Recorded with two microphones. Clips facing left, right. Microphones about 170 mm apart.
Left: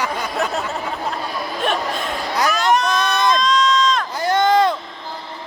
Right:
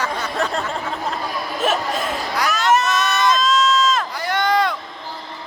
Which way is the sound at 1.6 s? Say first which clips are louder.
Right 1 dB; 5° right (ahead or behind).